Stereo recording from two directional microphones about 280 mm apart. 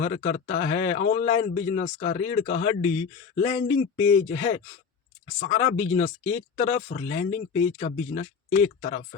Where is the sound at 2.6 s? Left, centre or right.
Centre.